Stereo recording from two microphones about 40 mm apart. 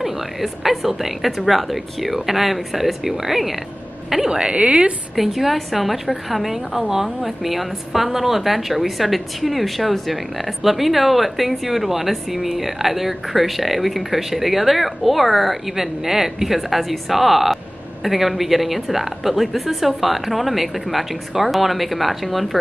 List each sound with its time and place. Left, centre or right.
0.0 s speech: centre
4.4 s a woman's voice: right
5.1 s speech: centre